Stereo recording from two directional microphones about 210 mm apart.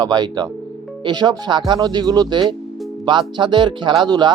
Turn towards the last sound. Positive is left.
turn(degrees=-20)  # may be behind; listen again after turning